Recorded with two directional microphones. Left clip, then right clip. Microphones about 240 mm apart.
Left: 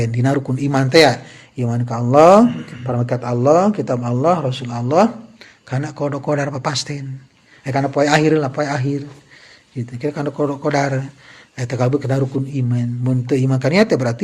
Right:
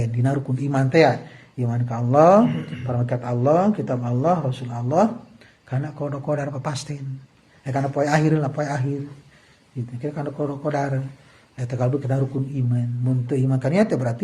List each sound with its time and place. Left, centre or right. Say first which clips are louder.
0.0 s a man's voice: left 7 dB; left
10.0 s a man's voice: left 7 dB; left